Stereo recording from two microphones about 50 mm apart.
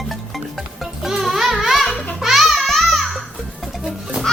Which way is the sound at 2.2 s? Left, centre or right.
Centre.